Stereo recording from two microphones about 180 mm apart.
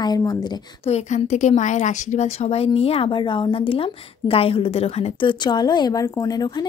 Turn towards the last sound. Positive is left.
turn(degrees=20)  # may be behind; listen again after turning